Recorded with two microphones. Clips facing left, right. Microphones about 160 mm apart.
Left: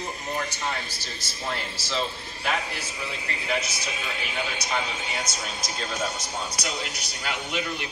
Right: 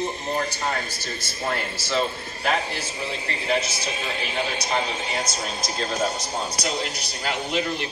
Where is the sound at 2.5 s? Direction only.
30° right (ahead or behind).